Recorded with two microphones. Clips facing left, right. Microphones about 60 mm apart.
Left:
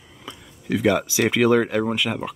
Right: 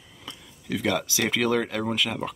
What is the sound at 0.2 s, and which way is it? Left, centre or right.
Speech, centre.